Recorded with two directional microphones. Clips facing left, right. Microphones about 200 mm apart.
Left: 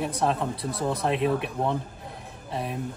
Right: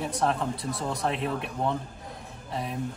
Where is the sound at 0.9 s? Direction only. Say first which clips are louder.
Left 6 dB; 65° left (ahead or behind).